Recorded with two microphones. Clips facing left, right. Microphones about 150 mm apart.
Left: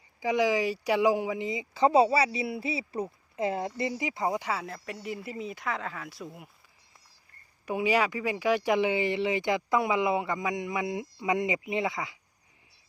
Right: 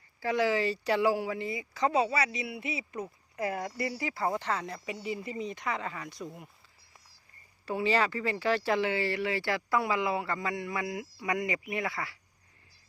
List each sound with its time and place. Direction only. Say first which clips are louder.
0.2 s speech: left 2 dB; 15° left (ahead or behind)
7.6 s speech: left 2 dB; 15° left (ahead or behind)